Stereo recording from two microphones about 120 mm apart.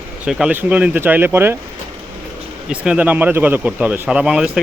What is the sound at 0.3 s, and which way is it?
Speech, 5° right (ahead or behind).